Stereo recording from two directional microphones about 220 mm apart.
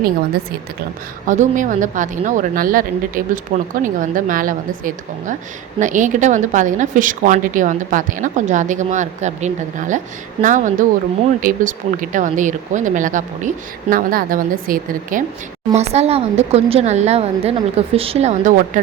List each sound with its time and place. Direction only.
1.3 s a woman's voice: 35° right (ahead or behind)
15.7 s speech: 30° right (ahead or behind)